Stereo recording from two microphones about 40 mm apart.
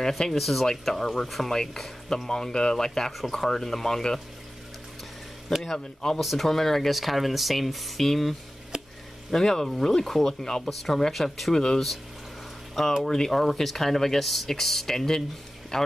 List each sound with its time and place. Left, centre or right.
0.4 s speech: centre
5.6 s speech: centre
8.7 s a sound: right
9.3 s speech: centre
11.5 s speech: centre
13.0 s speech: centre